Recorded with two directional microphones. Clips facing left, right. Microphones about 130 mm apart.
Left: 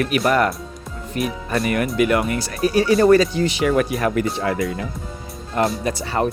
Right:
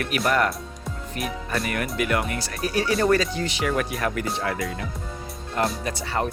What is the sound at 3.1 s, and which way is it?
Speech, 15° left (ahead or behind).